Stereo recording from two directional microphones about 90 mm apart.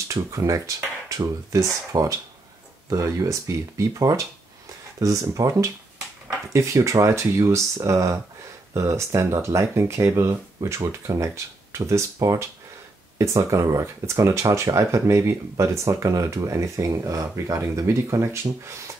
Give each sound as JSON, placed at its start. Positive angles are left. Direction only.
{"t": 0.1, "sound": "speech", "side_deg": -35}